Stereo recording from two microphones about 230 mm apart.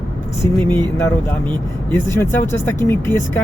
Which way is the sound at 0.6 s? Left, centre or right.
Centre.